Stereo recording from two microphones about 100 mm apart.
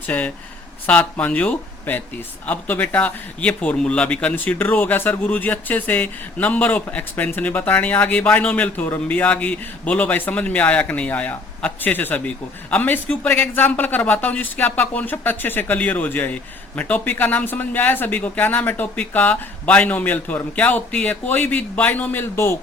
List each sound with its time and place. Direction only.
0.1 s speech: 15° left (ahead or behind)